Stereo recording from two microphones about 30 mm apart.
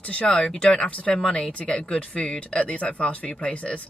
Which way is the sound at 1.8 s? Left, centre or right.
Left.